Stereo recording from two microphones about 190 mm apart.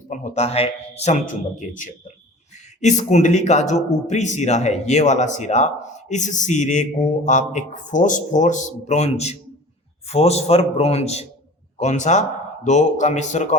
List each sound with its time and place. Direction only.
0.1 s speech: 40° left (ahead or behind)